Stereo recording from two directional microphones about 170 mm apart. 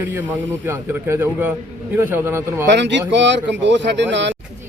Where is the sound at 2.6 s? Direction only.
90° right.